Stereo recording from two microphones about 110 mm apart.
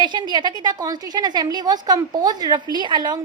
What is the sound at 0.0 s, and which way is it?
A woman's voice, 45° right (ahead or behind).